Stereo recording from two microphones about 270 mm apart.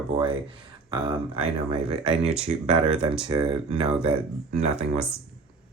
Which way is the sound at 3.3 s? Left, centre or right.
Centre.